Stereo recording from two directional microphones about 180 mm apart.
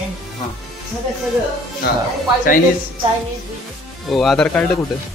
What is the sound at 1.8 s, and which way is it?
Speech, 60° left (ahead or behind).